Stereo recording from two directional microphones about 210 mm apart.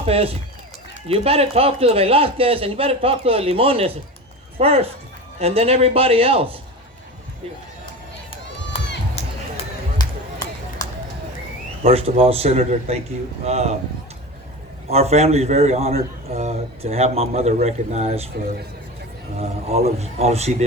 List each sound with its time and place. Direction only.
0.0 s a man's voice: 30° right (ahead or behind)
9.2 s a sound: 30° left (ahead or behind)
10.0 s a sound: 20° left (ahead or behind)
11.9 s a man's voice: 25° right (ahead or behind)
14.8 s a man's voice: 30° right (ahead or behind)
19.4 s a man's voice: 30° right (ahead or behind)